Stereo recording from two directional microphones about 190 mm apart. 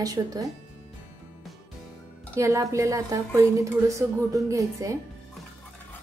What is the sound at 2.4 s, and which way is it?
A woman's voice, 15° right (ahead or behind).